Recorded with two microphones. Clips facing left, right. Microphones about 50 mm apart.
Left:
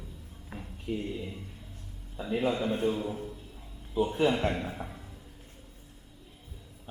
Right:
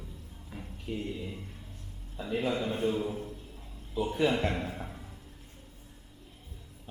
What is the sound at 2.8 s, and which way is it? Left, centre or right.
Speech, centre.